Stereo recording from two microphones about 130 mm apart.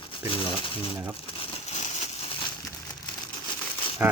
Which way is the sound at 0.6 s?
45° left (ahead or behind).